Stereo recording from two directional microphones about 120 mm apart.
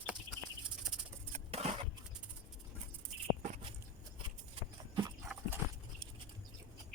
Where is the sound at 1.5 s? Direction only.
60° right (ahead or behind).